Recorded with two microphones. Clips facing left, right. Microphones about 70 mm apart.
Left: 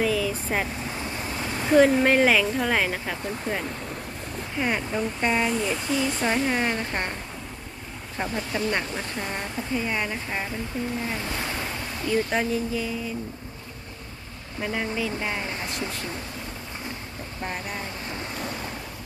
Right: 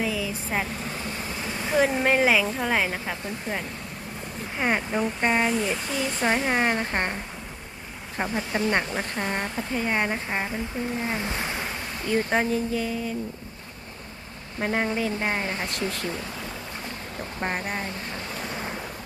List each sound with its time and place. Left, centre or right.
0.0 s vehicle: centre
1.6 s speech: centre
4.5 s speech: right; by 6.2 s centre
6.2 s speech: centre
8.2 s speech: centre
9.7 s speech: right
10.2 s speech: centre
12.0 s speech: right
14.6 s speech: right
15.7 s speech: right
17.4 s speech: right